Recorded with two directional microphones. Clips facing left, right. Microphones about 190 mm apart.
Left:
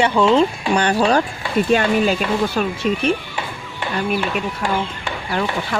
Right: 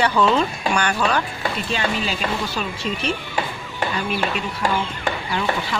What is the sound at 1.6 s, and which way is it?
Speech, 55° left (ahead or behind).